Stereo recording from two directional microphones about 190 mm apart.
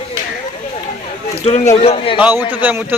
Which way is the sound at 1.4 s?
35° left (ahead or behind).